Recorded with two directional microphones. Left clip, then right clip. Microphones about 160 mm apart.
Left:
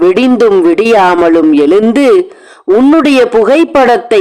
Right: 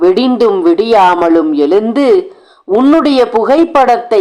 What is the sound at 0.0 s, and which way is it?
A man's voice, 40° left (ahead or behind).